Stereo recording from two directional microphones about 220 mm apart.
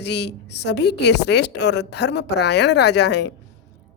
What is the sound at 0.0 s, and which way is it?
A woman's voice, 50° left (ahead or behind).